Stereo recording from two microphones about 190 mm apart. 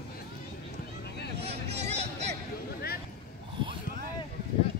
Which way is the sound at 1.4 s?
35° right (ahead or behind).